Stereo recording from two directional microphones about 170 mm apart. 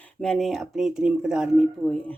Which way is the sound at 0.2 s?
5° left (ahead or behind).